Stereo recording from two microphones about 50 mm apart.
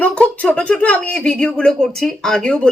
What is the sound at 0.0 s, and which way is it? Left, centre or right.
Speech, left.